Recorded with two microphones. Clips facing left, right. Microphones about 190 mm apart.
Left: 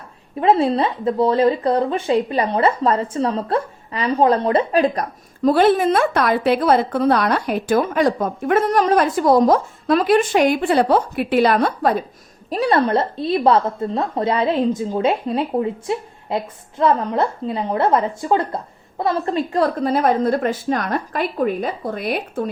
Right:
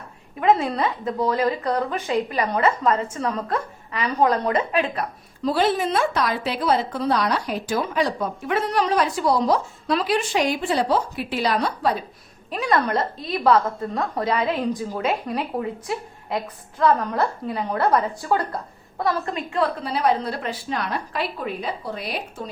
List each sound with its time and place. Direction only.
0.3 s speech: 30° left (ahead or behind); by 12.0 s 50° left (ahead or behind)
12.5 s a woman's voice: 35° left (ahead or behind); by 22.4 s 55° left (ahead or behind)